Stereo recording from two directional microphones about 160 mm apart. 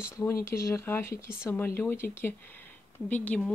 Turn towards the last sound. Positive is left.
turn(degrees=10)  # may be behind; listen again after turning